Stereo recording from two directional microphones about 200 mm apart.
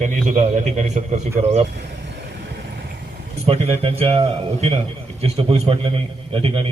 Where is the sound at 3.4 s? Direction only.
30° right (ahead or behind).